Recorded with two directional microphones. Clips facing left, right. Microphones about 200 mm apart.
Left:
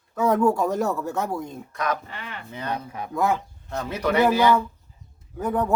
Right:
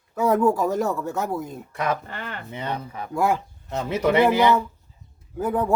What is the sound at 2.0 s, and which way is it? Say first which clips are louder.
Speech: right 3 dB; 50° right (ahead or behind).